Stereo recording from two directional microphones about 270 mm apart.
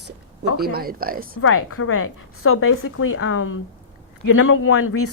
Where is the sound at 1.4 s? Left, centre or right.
Left.